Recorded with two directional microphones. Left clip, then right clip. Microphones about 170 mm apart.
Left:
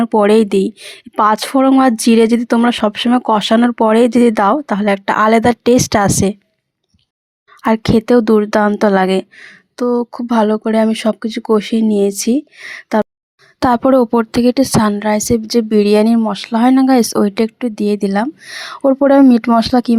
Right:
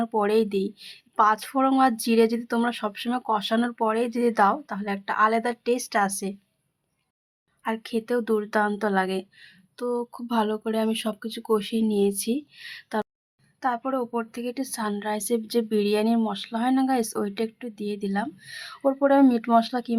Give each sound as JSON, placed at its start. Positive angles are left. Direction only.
{"t": 0.0, "sound": "speech", "side_deg": 40}
{"t": 7.6, "sound": "speech", "side_deg": 50}
{"t": 13.6, "sound": "speech", "side_deg": 55}